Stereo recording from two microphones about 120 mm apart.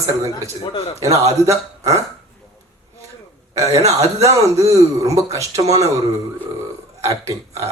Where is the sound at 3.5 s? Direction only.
30° right (ahead or behind).